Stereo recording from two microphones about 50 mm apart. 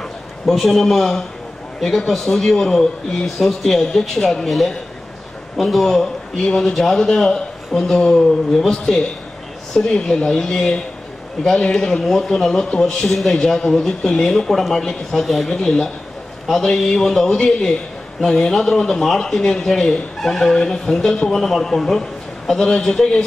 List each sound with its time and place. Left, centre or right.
0.5 s a man's voice: centre
9.9 s a man's voice: centre
15.5 s a man's voice: centre